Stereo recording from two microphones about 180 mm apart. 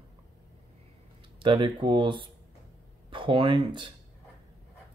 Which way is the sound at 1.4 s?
25° right (ahead or behind).